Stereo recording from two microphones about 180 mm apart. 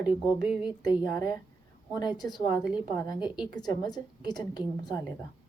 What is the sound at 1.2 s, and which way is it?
Speech, 20° left (ahead or behind).